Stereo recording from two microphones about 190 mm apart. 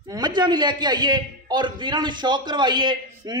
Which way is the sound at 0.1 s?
20° right (ahead or behind).